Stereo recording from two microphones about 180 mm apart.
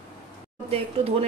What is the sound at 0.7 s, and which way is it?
Speech, 35° right (ahead or behind).